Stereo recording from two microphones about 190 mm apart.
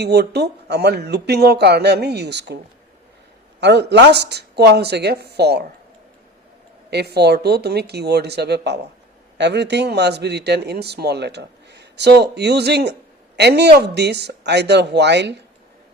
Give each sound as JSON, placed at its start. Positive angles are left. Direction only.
{"t": 0.0, "sound": "a man's voice", "side_deg": -60}
{"t": 3.6, "sound": "a man's voice", "side_deg": -65}
{"t": 6.9, "sound": "a man's voice", "side_deg": -60}